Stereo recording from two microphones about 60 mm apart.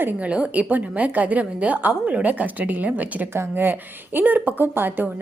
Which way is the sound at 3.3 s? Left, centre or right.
Right.